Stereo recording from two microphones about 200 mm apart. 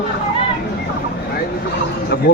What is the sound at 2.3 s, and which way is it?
Speech, 55° left (ahead or behind).